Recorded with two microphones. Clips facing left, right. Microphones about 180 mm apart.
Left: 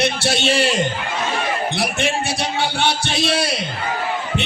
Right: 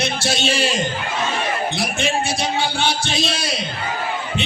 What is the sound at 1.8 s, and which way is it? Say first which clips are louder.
A man's voice: even; 65° left (ahead or behind).